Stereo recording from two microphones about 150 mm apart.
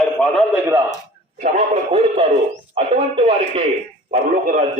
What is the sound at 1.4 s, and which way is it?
Speech, 45° right (ahead or behind).